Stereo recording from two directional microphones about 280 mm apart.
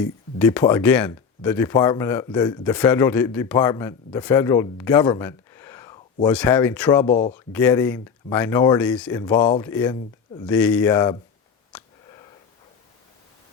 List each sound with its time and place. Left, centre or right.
0.0 s speech: centre
7.0 s speech: centre
7.3 s speech: centre
11.7 s sniff: centre